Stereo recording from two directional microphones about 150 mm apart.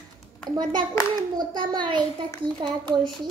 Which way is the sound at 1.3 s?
30° right (ahead or behind).